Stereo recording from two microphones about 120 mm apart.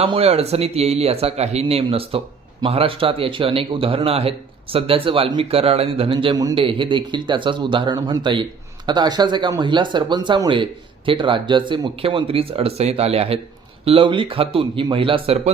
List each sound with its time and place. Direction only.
0.0 s speech: 50° right (ahead or behind)
6.3 s speech: 30° right (ahead or behind)
6.6 s speech: 45° right (ahead or behind)